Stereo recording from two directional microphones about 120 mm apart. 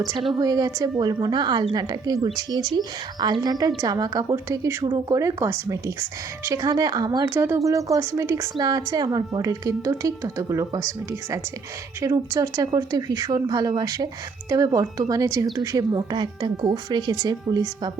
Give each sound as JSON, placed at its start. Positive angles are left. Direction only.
{"t": 0.0, "sound": "a woman's voice", "side_deg": -45}
{"t": 0.3, "sound": "a woman's voice", "side_deg": -35}
{"t": 7.3, "sound": "a woman's voice", "side_deg": -20}